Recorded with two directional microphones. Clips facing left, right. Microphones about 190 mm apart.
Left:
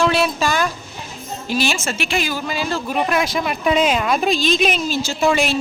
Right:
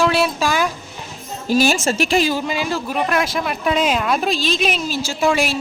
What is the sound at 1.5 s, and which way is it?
Speech, 45° right (ahead or behind).